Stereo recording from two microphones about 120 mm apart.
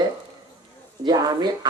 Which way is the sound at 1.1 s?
35° right (ahead or behind).